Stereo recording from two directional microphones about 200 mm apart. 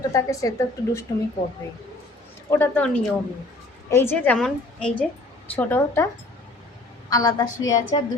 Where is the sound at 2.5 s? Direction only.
10° left (ahead or behind).